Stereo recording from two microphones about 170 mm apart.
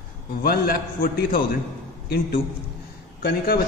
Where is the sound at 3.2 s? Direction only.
60° left (ahead or behind).